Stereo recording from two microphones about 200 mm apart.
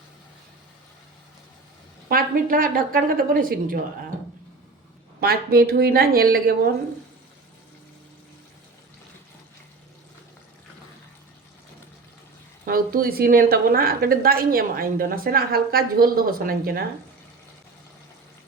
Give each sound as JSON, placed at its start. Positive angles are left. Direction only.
{"t": 2.0, "sound": "a woman's voice", "side_deg": -45}
{"t": 5.2, "sound": "a woman's voice", "side_deg": -50}
{"t": 12.6, "sound": "a woman's voice", "side_deg": -45}